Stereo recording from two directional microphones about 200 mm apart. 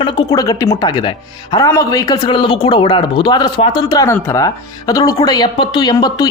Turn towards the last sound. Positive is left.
turn(degrees=20)  # may be behind; listen again after turning